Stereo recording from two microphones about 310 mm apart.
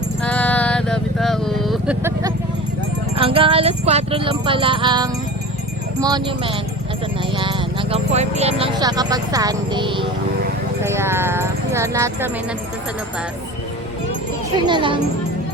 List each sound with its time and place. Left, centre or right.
0.2 s vehicle: centre
3.2 s speech: centre
14.7 s speech: centre